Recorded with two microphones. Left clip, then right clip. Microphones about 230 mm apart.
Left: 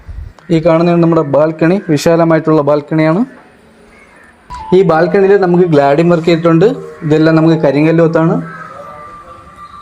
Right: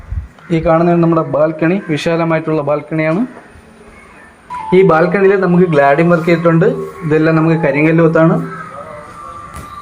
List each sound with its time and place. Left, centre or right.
0.5 s a man's voice: left
4.7 s a man's voice: left